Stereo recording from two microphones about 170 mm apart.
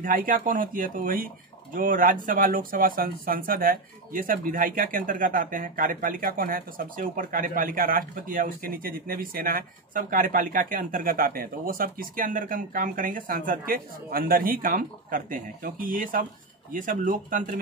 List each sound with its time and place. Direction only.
0.0 s speech: 55° right (ahead or behind)